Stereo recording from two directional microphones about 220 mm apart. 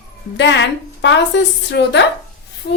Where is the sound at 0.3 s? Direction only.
55° left (ahead or behind).